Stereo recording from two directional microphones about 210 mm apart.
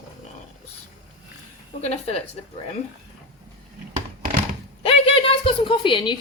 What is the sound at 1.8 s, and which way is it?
Speech, 30° left (ahead or behind).